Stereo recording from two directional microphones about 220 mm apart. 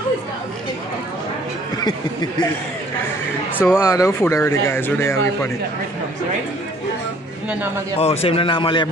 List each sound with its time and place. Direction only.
3.6 s speech: 10° left (ahead or behind)
8.0 s speech: 25° left (ahead or behind)